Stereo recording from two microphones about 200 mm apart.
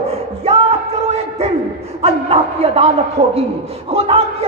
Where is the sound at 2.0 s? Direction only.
30° right (ahead or behind).